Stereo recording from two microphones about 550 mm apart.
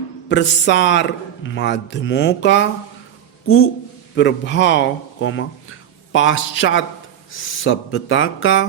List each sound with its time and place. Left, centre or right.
0.3 s speech: centre